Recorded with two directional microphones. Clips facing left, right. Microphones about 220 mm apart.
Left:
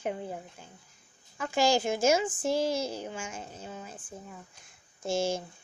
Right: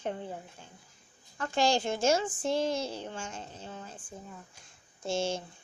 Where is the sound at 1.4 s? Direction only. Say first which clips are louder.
Left 2 dB; 10° left (ahead or behind).